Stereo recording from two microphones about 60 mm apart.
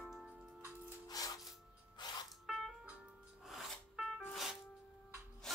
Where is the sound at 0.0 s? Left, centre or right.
Centre.